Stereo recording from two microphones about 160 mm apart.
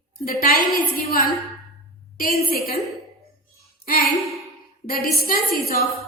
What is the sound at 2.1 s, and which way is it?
Speech, 65° left (ahead or behind).